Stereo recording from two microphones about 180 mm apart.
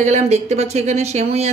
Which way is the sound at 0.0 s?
40° right (ahead or behind).